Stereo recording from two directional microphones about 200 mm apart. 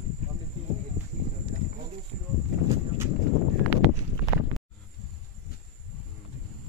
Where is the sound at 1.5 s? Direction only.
45° right (ahead or behind).